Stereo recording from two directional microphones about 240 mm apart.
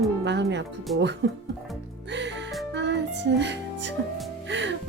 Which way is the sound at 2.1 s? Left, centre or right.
Right.